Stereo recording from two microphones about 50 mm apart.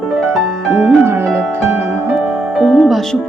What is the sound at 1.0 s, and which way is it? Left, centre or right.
Speech, right.